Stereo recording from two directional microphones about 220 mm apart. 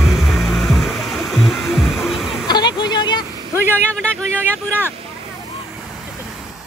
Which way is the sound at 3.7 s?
5° left (ahead or behind).